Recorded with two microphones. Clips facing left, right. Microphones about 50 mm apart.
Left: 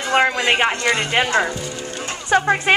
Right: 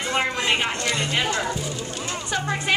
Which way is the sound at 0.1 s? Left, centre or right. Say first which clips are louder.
Left 7 dB; left.